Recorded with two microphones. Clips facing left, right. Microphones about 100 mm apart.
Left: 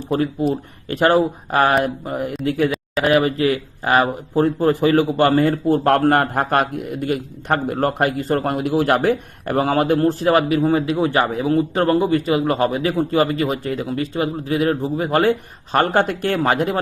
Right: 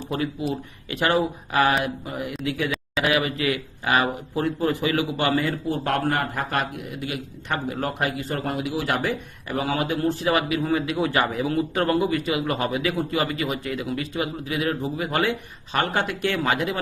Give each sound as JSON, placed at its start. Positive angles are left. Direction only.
{"t": 0.1, "sound": "speech", "side_deg": 35}